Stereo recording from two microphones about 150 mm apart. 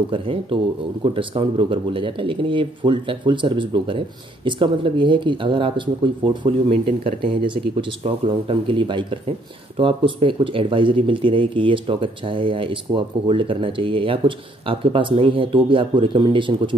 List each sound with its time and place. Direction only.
0.1 s speech: 35° right (ahead or behind)